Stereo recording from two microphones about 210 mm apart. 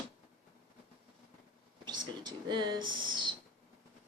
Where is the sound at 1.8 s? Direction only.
20° right (ahead or behind).